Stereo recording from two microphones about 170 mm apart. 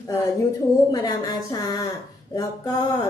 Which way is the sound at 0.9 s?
25° left (ahead or behind).